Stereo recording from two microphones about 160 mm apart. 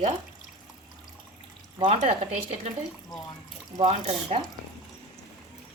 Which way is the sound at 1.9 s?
45° right (ahead or behind).